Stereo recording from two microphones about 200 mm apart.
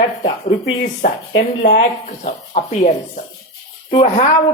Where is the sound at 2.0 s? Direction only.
35° left (ahead or behind).